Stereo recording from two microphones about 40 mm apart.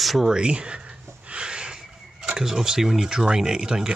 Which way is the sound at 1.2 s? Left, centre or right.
Right.